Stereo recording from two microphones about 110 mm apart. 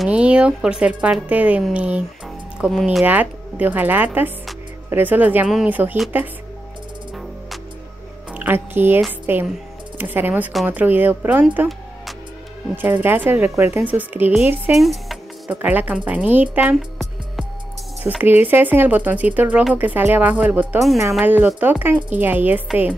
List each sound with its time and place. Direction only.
0.1 s speech: 10° right (ahead or behind)
2.6 s speech: centre (ahead or behind)
3.1 s speech: 15° right (ahead or behind)
8.3 s speech: 20° right (ahead or behind)
12.7 s speech: 15° right (ahead or behind)
14.8 s music: centre (ahead or behind)
15.5 s speech: 15° right (ahead or behind)
18.0 s speech: 15° right (ahead or behind)